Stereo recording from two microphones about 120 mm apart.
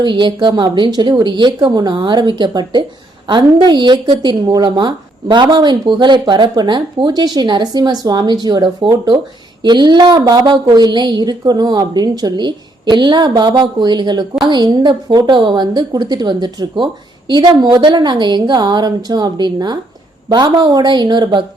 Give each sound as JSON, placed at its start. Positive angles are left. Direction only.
{"t": 0.0, "sound": "a woman's voice", "side_deg": -40}